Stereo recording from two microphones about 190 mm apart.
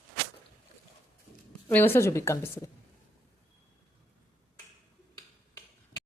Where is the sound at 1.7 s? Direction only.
10° left (ahead or behind).